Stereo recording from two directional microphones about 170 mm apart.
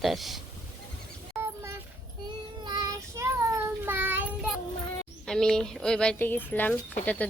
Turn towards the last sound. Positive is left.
turn(degrees=10)  # may be behind; listen again after turning